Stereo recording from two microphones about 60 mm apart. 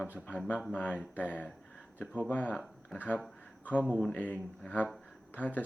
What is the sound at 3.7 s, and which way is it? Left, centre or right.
Speech, left.